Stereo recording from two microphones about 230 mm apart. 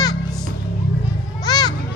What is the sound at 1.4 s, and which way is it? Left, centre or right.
Children playing, centre.